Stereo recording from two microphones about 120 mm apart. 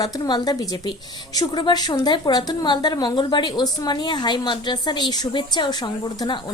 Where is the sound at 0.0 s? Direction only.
35° left (ahead or behind).